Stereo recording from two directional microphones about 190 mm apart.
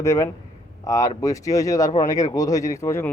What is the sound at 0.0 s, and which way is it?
Speech, 15° left (ahead or behind).